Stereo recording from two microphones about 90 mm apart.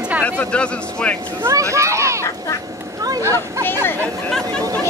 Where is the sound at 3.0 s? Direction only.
45° right (ahead or behind).